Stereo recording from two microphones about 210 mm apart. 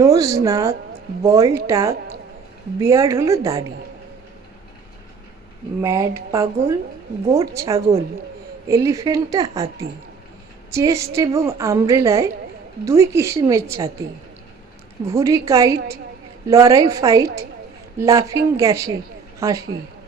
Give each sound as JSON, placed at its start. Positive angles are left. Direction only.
{"t": 0.0, "sound": "a woman's voice", "side_deg": -15}
{"t": 5.8, "sound": "a woman's voice", "side_deg": -15}
{"t": 7.8, "sound": "a woman's voice", "side_deg": -30}
{"t": 8.6, "sound": "a woman's voice", "side_deg": -15}
{"t": 15.0, "sound": "a woman's voice", "side_deg": -15}